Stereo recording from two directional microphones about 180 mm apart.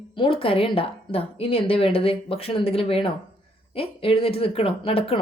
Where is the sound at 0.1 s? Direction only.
30° left (ahead or behind).